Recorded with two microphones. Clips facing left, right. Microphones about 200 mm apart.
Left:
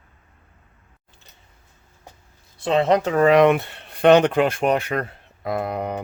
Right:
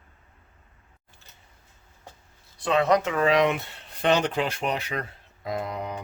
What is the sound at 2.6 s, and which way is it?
Speech, 25° left (ahead or behind).